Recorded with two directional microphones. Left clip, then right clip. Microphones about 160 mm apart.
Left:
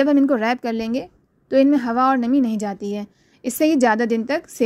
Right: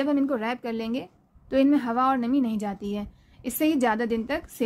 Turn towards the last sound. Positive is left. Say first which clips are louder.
# left 6 dB
turn(degrees=35)  # may be behind; listen again after turning